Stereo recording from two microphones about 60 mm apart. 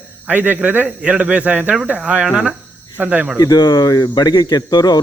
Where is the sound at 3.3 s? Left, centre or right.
Left.